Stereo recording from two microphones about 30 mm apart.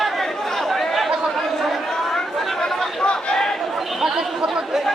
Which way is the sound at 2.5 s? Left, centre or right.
Centre.